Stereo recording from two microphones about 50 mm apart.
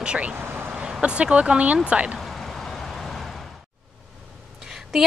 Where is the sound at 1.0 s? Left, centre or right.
Right.